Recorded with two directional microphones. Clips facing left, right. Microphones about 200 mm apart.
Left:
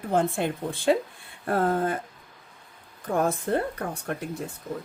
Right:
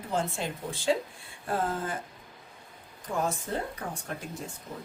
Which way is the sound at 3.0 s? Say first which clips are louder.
Left 6 dB; 55° left (ahead or behind).